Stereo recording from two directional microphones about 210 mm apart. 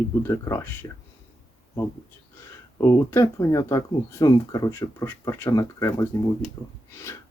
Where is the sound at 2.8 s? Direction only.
15° left (ahead or behind).